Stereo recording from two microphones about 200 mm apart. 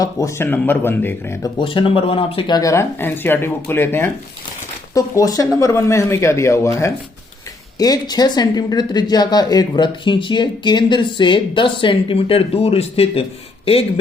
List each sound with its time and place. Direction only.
0.0 s speech: 15° left (ahead or behind)
1.5 s speech: 25° left (ahead or behind)